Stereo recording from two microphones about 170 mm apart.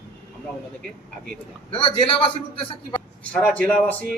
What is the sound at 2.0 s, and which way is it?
Speech, 35° left (ahead or behind).